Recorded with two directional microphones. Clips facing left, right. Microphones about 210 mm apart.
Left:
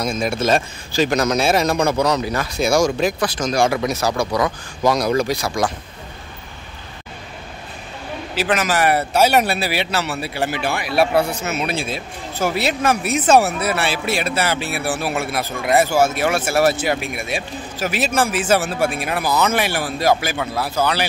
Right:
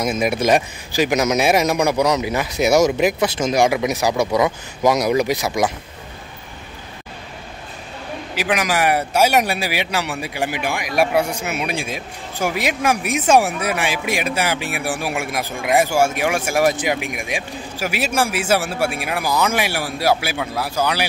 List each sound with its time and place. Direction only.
0.2 s speech: 15° right (ahead or behind)
8.4 s speech: 10° right (ahead or behind)